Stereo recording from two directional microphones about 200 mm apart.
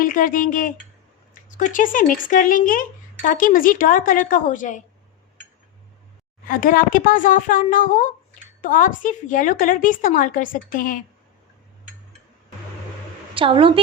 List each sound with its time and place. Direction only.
0.0 s speech: 45° left (ahead or behind)
6.5 s a woman's voice: 45° left (ahead or behind)
13.3 s a woman's voice: 25° right (ahead or behind)